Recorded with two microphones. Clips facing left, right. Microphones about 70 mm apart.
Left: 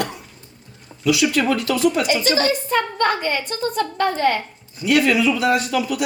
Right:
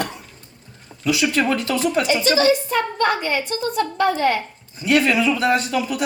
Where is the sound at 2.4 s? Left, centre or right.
Left.